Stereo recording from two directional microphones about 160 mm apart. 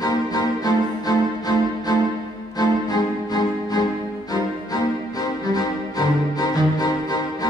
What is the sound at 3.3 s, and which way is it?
Music, 25° left (ahead or behind).